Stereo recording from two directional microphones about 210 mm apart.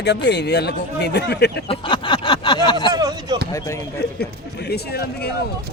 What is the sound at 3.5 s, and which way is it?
Speech, 15° left (ahead or behind).